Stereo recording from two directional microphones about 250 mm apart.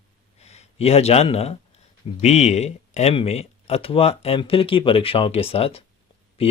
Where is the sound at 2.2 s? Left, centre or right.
Left.